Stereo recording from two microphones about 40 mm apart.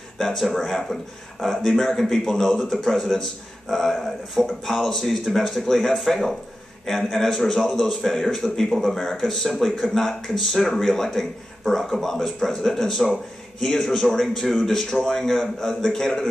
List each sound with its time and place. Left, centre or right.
0.2 s a man's voice: centre
8.7 s a man's voice: centre